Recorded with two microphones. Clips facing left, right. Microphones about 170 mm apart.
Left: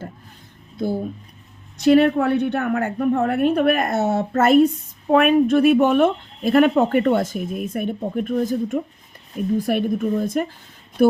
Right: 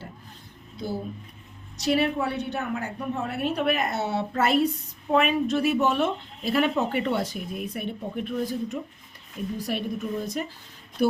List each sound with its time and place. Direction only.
1.8 s a woman's voice: 60° left (ahead or behind)